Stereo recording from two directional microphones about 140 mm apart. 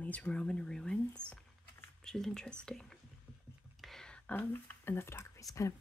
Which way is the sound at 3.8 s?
Centre (ahead or behind).